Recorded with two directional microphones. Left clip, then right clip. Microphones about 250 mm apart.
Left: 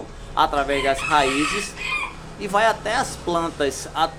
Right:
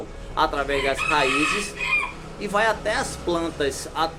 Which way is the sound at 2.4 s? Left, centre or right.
Centre.